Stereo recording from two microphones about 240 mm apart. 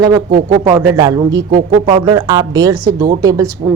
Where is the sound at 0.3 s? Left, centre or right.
Right.